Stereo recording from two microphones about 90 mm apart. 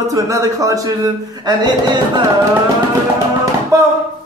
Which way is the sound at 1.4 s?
55° right (ahead or behind).